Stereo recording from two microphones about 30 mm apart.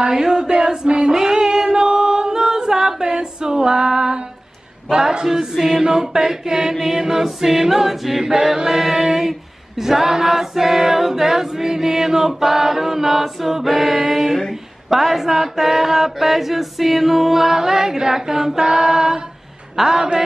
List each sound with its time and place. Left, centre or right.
0.0 s a sound: right
0.8 s female singing: right
4.9 s choir: right
19.8 s a man's voice: right